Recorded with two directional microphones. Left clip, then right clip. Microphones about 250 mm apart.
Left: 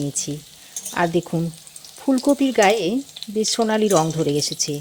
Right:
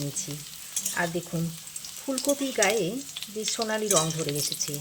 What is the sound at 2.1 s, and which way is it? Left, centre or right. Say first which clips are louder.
Speech: left 9 dB; left.